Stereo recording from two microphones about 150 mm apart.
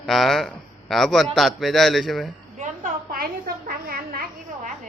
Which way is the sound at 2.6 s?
70° right (ahead or behind).